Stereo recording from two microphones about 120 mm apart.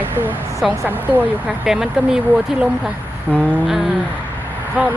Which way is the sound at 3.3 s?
10° left (ahead or behind).